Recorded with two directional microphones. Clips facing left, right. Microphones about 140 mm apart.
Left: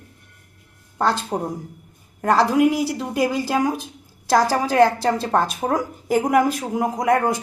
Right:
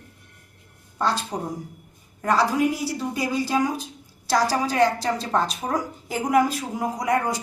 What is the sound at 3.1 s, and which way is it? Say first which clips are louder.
A woman's voice: left 2 dB; 55° left (ahead or behind).